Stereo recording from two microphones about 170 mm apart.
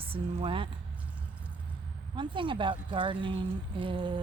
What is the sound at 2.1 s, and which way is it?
Speech, 30° right (ahead or behind).